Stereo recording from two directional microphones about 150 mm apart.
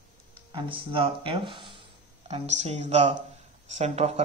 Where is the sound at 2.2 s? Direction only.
45° right (ahead or behind).